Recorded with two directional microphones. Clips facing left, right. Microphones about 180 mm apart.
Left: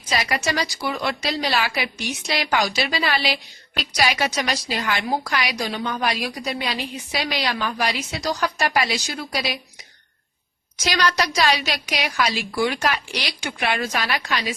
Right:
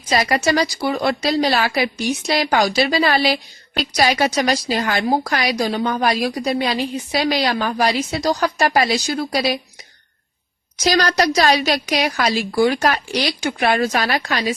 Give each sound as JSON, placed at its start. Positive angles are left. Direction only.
{"t": 0.1, "sound": "a woman's voice", "side_deg": -40}
{"t": 10.8, "sound": "a woman's voice", "side_deg": -40}